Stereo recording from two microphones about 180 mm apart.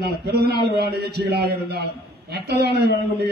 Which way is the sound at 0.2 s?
65° right (ahead or behind).